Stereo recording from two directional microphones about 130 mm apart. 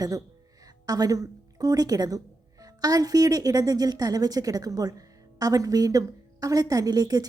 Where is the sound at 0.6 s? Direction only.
30° right (ahead or behind).